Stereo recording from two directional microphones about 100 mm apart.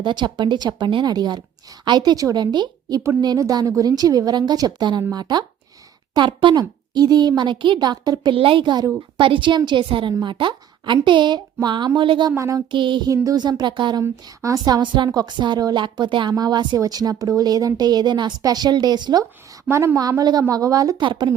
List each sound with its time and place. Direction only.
0.0 s a woman's voice: 50° right (ahead or behind)
8.3 s a woman's voice: 60° right (ahead or behind)
12.4 s speech: 35° right (ahead or behind)
12.7 s a woman's voice: 55° right (ahead or behind)
13.2 s a woman's voice: 40° right (ahead or behind)
14.0 s a woman's voice: 35° right (ahead or behind)
21.0 s a woman's voice: 55° right (ahead or behind)